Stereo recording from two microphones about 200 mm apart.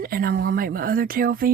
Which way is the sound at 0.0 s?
45° right (ahead or behind).